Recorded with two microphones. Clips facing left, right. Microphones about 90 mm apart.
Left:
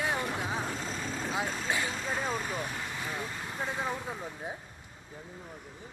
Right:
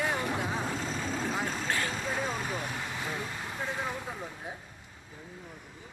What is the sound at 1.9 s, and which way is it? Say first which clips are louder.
Speech: even; centre (ahead or behind).